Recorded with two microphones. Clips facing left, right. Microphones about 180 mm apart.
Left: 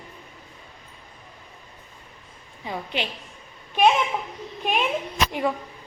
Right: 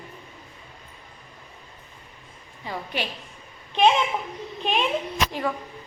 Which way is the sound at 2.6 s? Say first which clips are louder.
Left 1 dB; 20° left (ahead or behind).